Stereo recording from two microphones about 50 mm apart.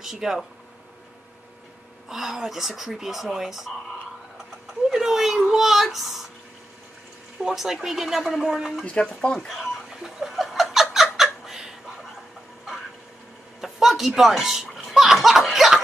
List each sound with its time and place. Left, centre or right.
0.0 s speech: centre
2.0 s speech: centre
4.8 s speech: centre
7.3 s speech: centre
8.8 s speech: left
10.0 s a sound: centre
13.6 s speech: centre